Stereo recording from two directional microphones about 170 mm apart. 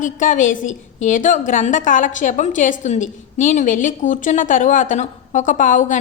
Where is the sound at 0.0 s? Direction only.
50° left (ahead or behind).